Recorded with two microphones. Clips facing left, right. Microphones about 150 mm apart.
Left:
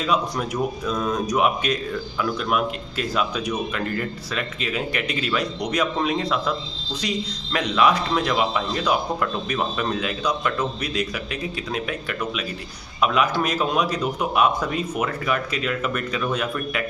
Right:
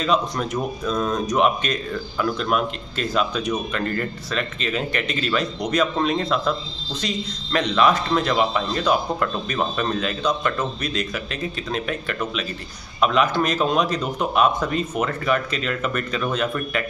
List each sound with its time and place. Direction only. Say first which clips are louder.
0.0 s speech: right 1 dB; 10° left (ahead or behind)